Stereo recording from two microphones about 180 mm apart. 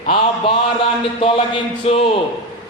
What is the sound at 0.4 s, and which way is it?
Speech, 30° left (ahead or behind).